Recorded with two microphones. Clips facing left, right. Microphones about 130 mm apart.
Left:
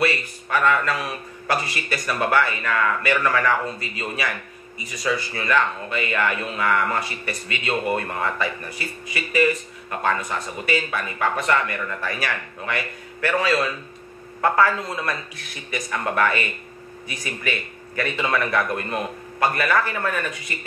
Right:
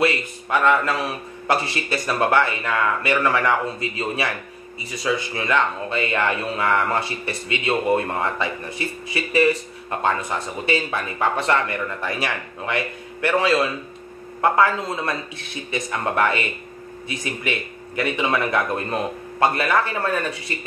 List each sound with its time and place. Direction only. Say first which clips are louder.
0.0 s speech: right 2 dB; 20° right (ahead or behind)
4.9 s speech: right 1 dB; 20° right (ahead or behind)